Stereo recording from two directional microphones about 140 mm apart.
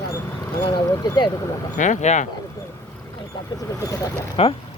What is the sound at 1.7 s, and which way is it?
Speech, 60° left (ahead or behind).